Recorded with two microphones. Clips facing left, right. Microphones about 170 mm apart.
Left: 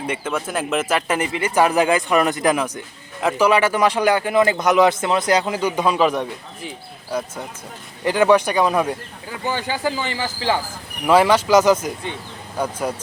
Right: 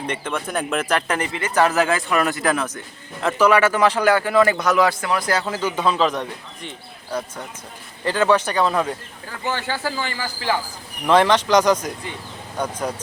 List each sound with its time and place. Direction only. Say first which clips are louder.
0.1 s speech: left 2 dB; 5° left (ahead or behind); by 10.6 s 20° left (ahead or behind)
11.0 s speech: left 1 dB; 10° left (ahead or behind)